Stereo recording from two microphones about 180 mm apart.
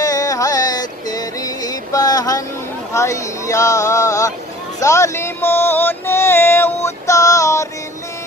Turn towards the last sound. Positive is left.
turn(degrees=15)  # may be behind; listen again after turning